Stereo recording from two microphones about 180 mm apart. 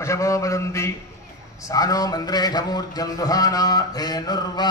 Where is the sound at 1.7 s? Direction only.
20° left (ahead or behind).